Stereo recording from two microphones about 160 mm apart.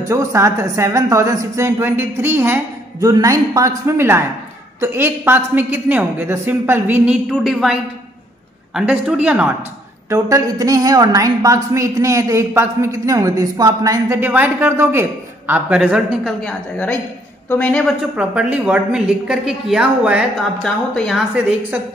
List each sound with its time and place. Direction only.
0.1 s a woman's voice: 20° right (ahead or behind)
7.2 s a woman's voice: centre (ahead or behind)
10.0 s a woman's voice: 20° right (ahead or behind); by 17.9 s 5° left (ahead or behind)
18.1 s a woman's voice: 10° right (ahead or behind)
20.5 s a woman's voice: 5° left (ahead or behind)